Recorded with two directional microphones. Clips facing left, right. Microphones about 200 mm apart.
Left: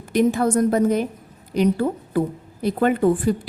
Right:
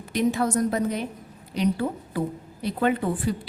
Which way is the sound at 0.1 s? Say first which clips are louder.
Left 5 dB; 50° left (ahead or behind).